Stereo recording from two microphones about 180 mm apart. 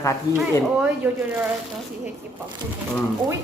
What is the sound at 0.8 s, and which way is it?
Speech, 10° right (ahead or behind).